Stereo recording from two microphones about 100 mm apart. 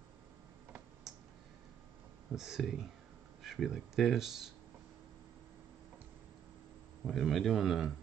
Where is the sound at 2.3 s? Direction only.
5° right (ahead or behind).